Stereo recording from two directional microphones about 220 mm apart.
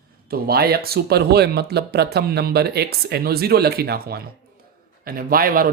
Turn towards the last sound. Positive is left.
turn(degrees=-40)  # may be behind; listen again after turning